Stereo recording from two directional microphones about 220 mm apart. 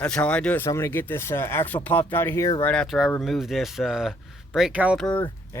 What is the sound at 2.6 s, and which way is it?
Speech, centre (ahead or behind).